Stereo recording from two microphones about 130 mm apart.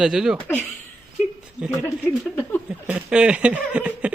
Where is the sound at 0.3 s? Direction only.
10° left (ahead or behind).